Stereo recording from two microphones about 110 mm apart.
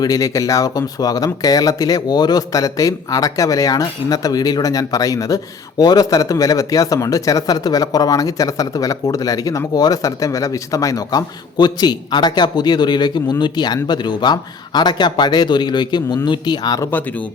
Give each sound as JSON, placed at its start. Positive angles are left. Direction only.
{"t": 0.0, "sound": "speech", "side_deg": 30}